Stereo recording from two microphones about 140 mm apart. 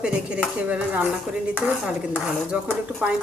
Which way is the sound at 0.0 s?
10° right (ahead or behind).